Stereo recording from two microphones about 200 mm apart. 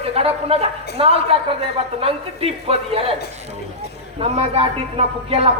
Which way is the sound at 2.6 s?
30° right (ahead or behind).